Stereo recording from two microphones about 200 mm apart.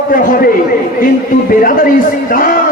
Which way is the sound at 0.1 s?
45° left (ahead or behind).